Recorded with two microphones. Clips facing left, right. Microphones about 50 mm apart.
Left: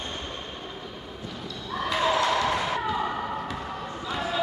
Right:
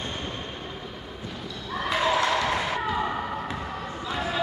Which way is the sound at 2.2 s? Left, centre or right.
Centre.